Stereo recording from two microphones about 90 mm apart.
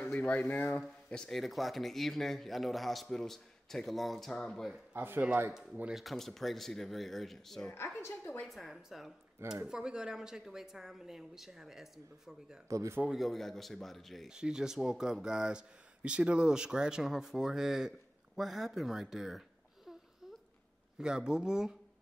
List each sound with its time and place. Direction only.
0.0 s speech: 15° left (ahead or behind)
1.2 s speech: centre (ahead or behind)
4.9 s speech: 25° right (ahead or behind)
5.5 s speech: 5° right (ahead or behind)
7.7 s a woman's voice: 30° left (ahead or behind)
8.5 s speech: centre (ahead or behind)
12.6 s speech: 35° right (ahead or behind)
13.0 s speech: centre (ahead or behind)
21.0 s speech: 10° right (ahead or behind)